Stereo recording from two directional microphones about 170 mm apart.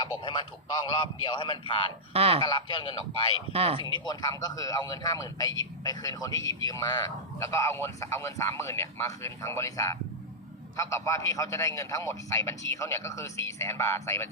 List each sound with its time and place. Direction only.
0.0 s a man's voice: 30° left (ahead or behind)
2.1 s speech: 35° right (ahead or behind)
2.4 s speech: 25° left (ahead or behind)
3.5 s speech: 35° right (ahead or behind)
3.8 s a man's voice: 25° left (ahead or behind)